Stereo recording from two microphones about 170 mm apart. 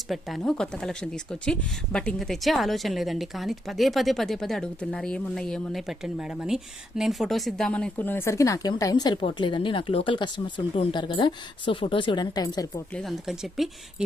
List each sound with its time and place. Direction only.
0.1 s speech: centre (ahead or behind); by 12.8 s 20° left (ahead or behind)
12.9 s speech: centre (ahead or behind)